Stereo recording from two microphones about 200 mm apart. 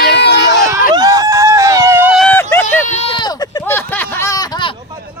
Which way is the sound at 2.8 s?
35° left (ahead or behind).